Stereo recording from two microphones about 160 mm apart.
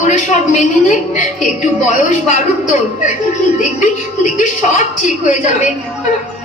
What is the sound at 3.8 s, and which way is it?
A woman's voice, 50° left (ahead or behind).